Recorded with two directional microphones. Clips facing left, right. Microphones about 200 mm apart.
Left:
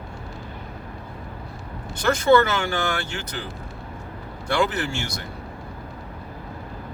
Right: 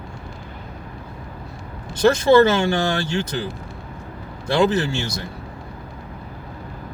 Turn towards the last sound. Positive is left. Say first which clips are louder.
# right 6 dB
turn(degrees=-25)  # may be behind; listen again after turning